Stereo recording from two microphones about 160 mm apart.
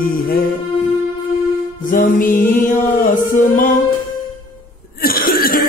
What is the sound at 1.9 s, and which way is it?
Mantra, 60° left (ahead or behind).